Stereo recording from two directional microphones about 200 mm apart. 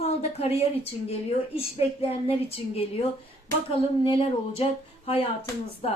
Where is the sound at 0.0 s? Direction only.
30° left (ahead or behind).